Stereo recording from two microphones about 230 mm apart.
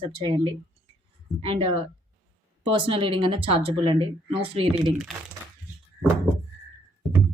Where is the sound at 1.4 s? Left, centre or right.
Right.